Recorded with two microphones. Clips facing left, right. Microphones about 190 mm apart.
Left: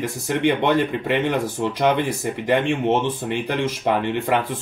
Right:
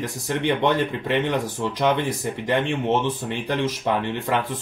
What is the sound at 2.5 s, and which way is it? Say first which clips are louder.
Speech: left 3 dB; 10° left (ahead or behind).